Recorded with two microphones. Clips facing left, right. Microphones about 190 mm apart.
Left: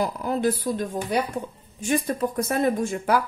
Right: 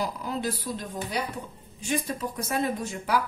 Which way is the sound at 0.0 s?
50° left (ahead or behind).